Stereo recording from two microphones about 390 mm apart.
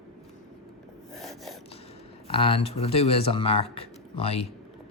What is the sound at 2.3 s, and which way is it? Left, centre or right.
Speech, centre.